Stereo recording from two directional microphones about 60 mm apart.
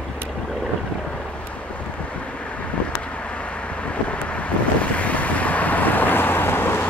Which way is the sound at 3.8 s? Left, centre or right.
Left.